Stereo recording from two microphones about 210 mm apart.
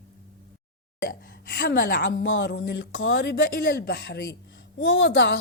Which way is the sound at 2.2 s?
60° left (ahead or behind).